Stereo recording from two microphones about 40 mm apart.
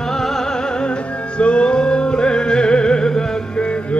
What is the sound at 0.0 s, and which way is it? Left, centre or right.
Music, centre.